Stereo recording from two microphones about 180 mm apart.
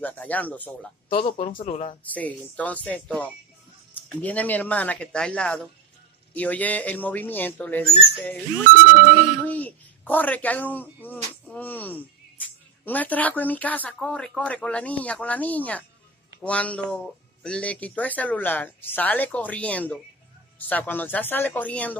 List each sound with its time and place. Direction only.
0.0 s speech: 10° left (ahead or behind)
1.0 s speech: 30° left (ahead or behind)
2.0 s speech: 10° left (ahead or behind)